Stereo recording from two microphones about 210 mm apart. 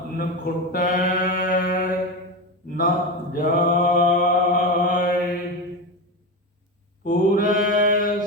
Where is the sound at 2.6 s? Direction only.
40° left (ahead or behind).